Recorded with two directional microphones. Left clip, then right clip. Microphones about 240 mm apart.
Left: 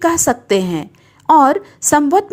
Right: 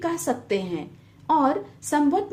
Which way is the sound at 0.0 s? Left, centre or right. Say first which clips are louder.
Left 11 dB; left.